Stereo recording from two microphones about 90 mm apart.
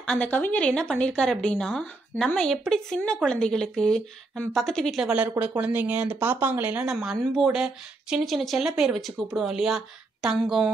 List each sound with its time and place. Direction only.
0.1 s speech: 15° left (ahead or behind)
5.0 s speech: 15° right (ahead or behind)
7.0 s speech: 5° right (ahead or behind)